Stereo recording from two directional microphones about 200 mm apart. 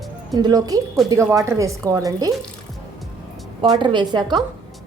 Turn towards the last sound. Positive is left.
turn(degrees=-20)  # may be behind; listen again after turning